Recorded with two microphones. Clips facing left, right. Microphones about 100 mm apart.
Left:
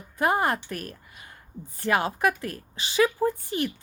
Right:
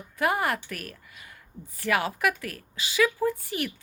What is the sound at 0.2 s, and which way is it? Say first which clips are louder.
A woman's voice: left 2 dB; 30° left (ahead or behind).